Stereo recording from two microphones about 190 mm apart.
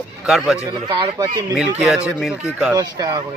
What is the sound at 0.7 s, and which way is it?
Speech, 25° right (ahead or behind).